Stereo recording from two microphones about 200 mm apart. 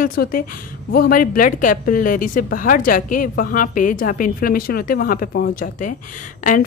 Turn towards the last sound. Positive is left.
turn(degrees=40)  # may be behind; listen again after turning